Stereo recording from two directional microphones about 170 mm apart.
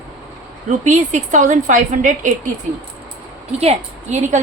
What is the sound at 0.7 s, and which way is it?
A woman's voice, 45° right (ahead or behind).